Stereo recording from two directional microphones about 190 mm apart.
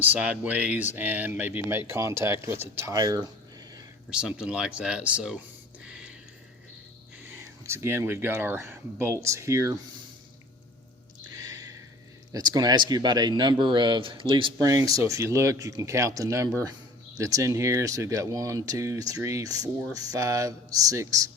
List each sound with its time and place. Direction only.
0.0 s speech: 5° right (ahead or behind)
4.1 s speech: 5° right (ahead or behind)
5.8 s a sound: 5° right (ahead or behind)
7.6 s speech: 15° right (ahead or behind)
11.4 s a sound: 20° right (ahead or behind)
12.3 s speech: 20° right (ahead or behind)